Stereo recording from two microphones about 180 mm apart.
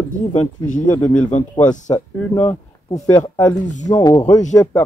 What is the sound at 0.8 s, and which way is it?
Speech, 10° left (ahead or behind).